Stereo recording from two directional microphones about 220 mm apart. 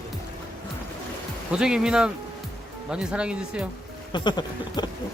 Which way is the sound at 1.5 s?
5° right (ahead or behind).